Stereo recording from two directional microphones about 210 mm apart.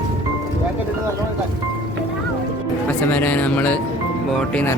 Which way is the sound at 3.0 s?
10° left (ahead or behind).